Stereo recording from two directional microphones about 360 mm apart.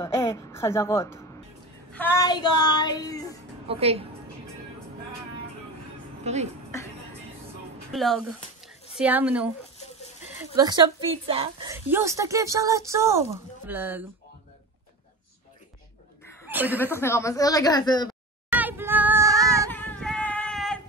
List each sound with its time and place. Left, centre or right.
0.0 s a sound: centre
1.9 s speech: centre
3.6 s a woman's voice: centre
6.2 s speech: centre
7.9 s a woman's voice: centre
10.5 s a woman's voice: centre
16.4 s chuckle: centre
16.8 s a woman's voice: centre
18.5 s child singing: centre
19.7 s a sound: centre